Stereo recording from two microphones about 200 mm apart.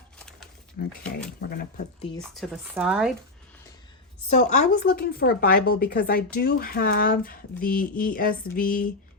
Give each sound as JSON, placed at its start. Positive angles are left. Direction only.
{"t": 0.8, "sound": "speech", "side_deg": 55}
{"t": 2.3, "sound": "speech", "side_deg": 0}
{"t": 4.3, "sound": "speech", "side_deg": 35}